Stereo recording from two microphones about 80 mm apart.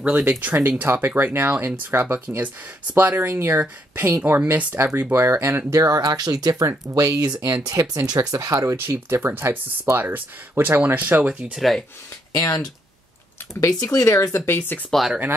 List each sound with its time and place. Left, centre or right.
0.0 s speech: right
5.1 s speech: right
11.5 s speech: centre
12.3 s speech: left
14.9 s speech: centre